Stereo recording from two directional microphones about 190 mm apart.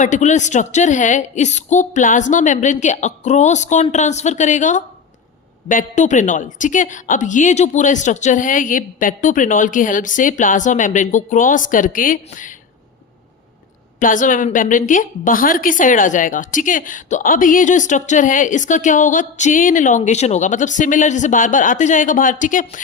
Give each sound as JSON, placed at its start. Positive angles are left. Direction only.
{"t": 0.0, "sound": "a man's voice", "side_deg": 40}
{"t": 14.0, "sound": "a woman's voice", "side_deg": 45}